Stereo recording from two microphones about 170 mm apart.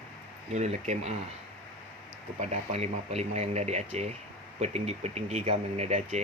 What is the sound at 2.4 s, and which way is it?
Speech, 40° right (ahead or behind).